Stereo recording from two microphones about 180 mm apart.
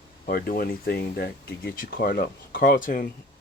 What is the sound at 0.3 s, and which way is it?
Speech, 55° left (ahead or behind).